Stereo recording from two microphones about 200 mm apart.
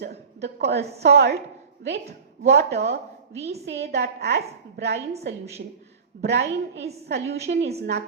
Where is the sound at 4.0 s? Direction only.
55° right (ahead or behind).